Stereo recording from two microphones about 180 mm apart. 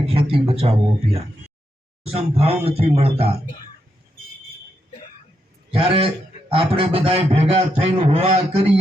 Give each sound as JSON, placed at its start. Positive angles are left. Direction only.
{"t": 0.0, "sound": "a man's voice", "side_deg": -30}
{"t": 5.7, "sound": "a man's voice", "side_deg": -30}